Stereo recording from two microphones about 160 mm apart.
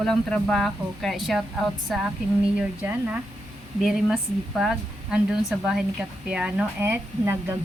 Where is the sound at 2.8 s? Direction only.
10° right (ahead or behind).